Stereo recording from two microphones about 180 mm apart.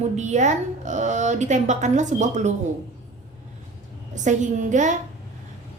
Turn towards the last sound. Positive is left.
turn(degrees=-45)  # may be behind; listen again after turning